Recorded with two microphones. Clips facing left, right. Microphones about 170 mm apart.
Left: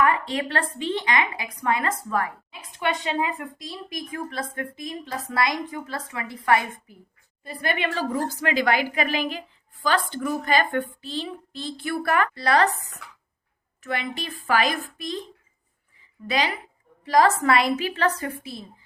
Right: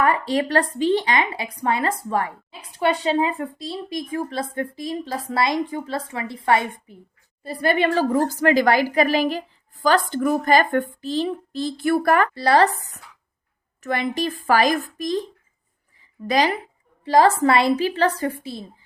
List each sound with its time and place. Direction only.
0.0 s a woman's voice: 35° right (ahead or behind)
13.8 s a woman's voice: 40° right (ahead or behind)
16.2 s a woman's voice: 40° right (ahead or behind)
17.0 s a woman's voice: 30° right (ahead or behind)